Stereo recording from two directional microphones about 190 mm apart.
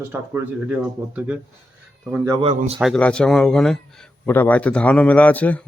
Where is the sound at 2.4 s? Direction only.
35° right (ahead or behind).